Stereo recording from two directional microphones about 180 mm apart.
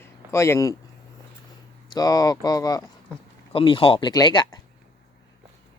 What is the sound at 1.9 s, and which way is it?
Speech, 20° left (ahead or behind).